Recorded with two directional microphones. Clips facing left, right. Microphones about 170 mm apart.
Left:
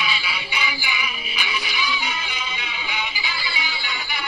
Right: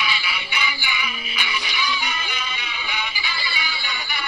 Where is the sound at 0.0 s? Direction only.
15° left (ahead or behind).